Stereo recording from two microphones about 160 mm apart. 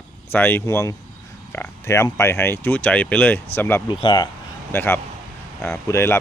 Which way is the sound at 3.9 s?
30° left (ahead or behind).